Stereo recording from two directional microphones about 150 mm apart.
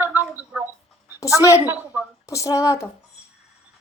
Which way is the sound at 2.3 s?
20° left (ahead or behind).